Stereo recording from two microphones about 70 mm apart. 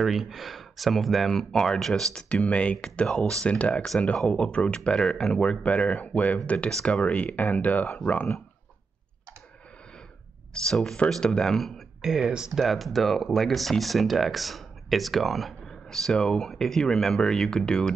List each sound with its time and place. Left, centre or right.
0.0 s speech: centre
2.2 s speech: centre
10.5 s speech: centre
12.6 s speech: centre